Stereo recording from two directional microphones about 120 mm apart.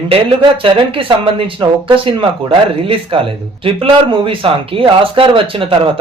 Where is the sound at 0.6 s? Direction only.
50° right (ahead or behind).